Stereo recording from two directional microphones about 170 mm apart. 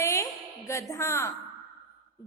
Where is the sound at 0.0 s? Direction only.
15° left (ahead or behind).